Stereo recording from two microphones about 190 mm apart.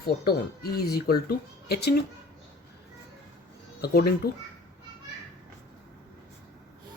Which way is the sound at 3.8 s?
55° left (ahead or behind).